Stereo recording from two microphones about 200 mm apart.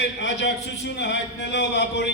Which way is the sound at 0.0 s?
60° left (ahead or behind).